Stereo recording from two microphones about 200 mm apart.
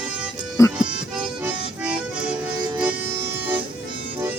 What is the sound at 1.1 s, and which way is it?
Accordion, 5° right (ahead or behind).